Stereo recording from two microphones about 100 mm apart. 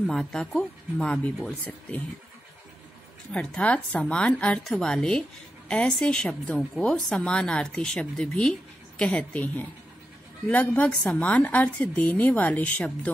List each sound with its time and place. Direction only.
0.0 s speech: 5° left (ahead or behind)
3.3 s a woman's voice: 10° left (ahead or behind)